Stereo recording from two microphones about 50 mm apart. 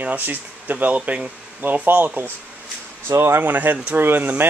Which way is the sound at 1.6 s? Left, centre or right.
Right.